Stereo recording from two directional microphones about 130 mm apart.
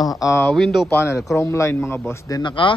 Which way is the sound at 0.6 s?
Centre (ahead or behind).